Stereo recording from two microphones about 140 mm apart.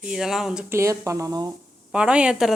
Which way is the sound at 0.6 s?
20° right (ahead or behind).